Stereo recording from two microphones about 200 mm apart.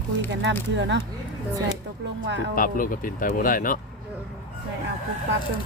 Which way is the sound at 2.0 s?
60° right (ahead or behind).